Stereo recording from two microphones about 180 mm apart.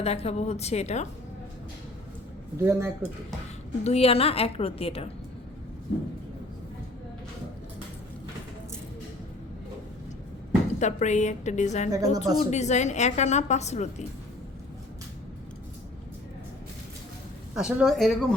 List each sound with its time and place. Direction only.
0.0 s a woman's voice: 35° left (ahead or behind)
2.6 s speech: 15° right (ahead or behind)
3.8 s a woman's voice: 35° left (ahead or behind)
10.8 s a woman's voice: 40° left (ahead or behind)
11.9 s speech: 20° right (ahead or behind)
12.4 s a woman's voice: 40° left (ahead or behind)
17.5 s speech: 5° right (ahead or behind)